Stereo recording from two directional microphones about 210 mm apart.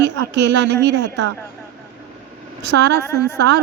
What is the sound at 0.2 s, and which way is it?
A woman's voice, 55° right (ahead or behind).